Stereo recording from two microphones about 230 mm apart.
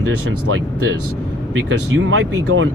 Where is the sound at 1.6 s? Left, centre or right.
Right.